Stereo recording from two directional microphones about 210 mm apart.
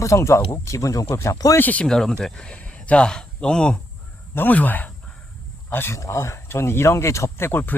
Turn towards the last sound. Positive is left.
turn(degrees=10)  # may be behind; listen again after turning